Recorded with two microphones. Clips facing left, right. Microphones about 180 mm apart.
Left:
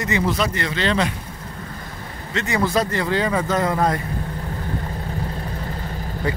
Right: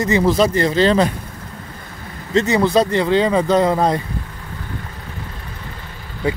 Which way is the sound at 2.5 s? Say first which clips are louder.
Right 3 dB; 20° right (ahead or behind).